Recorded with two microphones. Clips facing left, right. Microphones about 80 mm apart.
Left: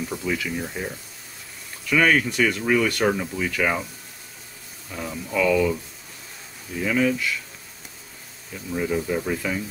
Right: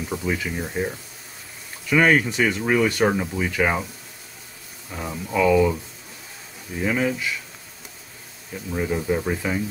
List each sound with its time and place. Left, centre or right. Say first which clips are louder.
0.2 s speech: right 1 dB; right
1.9 s speech: right 2 dB; centre
4.9 s speech: right 1 dB; right
6.8 s speech: left 1 dB; right
8.7 s speech: right 1 dB; centre